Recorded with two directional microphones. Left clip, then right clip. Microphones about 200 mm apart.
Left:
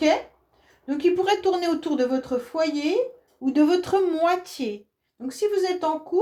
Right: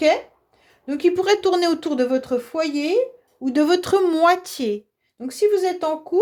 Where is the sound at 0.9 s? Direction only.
50° right (ahead or behind).